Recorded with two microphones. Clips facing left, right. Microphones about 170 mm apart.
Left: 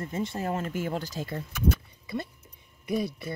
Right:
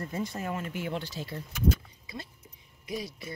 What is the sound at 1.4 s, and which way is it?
Speech, 60° left (ahead or behind).